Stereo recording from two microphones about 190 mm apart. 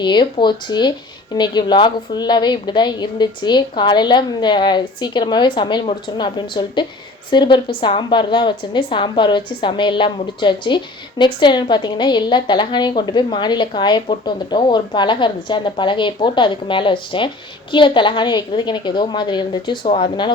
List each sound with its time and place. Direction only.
0.0 s a woman's voice: 25° left (ahead or behind)